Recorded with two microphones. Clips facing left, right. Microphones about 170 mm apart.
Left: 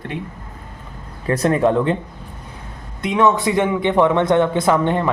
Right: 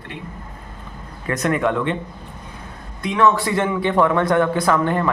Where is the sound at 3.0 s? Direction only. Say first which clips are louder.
Left 1 dB; 20° left (ahead or behind).